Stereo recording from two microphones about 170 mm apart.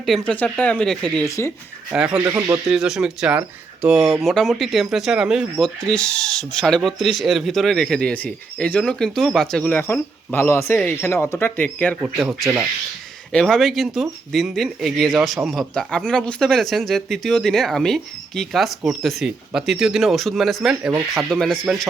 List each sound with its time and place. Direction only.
0.0 s speech: 5° left (ahead or behind)
1.2 s speech: 15° left (ahead or behind)
1.9 s speech: 5° right (ahead or behind)
2.7 s speech: 5° right (ahead or behind)
11.9 s speech: 5° right (ahead or behind)